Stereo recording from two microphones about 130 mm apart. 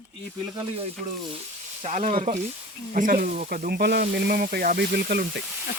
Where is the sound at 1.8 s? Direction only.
70° right (ahead or behind).